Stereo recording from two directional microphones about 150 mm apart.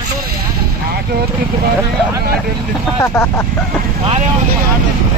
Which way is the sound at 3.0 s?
15° left (ahead or behind).